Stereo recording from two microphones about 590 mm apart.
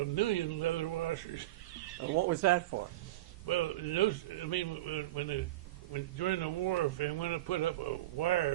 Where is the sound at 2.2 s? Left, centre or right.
Right.